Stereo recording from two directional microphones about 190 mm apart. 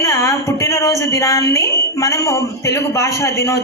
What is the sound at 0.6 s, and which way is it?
Speech, 15° left (ahead or behind).